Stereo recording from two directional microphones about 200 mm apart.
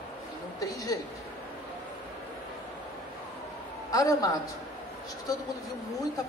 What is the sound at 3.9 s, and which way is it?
Speech, 15° left (ahead or behind).